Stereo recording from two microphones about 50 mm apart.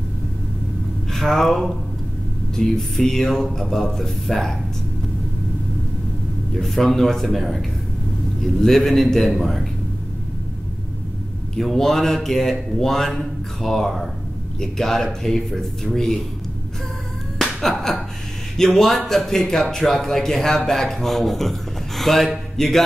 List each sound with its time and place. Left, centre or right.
1.1 s a man's voice: centre
6.5 s a man's voice: centre
11.5 s a man's voice: centre
17.6 s speech: centre